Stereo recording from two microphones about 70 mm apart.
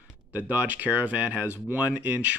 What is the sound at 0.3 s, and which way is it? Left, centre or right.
Speech, right.